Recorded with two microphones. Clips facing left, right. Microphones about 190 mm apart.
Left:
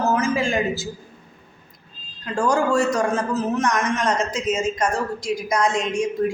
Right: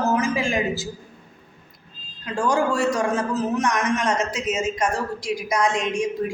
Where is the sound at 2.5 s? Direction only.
40° left (ahead or behind).